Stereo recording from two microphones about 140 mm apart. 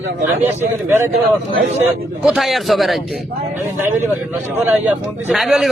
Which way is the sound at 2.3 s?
Centre (ahead or behind).